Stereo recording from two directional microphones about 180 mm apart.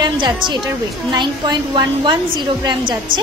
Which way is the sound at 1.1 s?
25° right (ahead or behind).